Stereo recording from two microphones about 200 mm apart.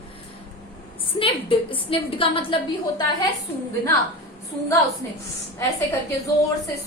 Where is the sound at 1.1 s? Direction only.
25° left (ahead or behind).